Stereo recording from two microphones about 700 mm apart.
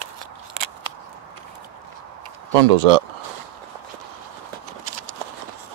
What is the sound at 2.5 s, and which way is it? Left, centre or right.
Speech, right.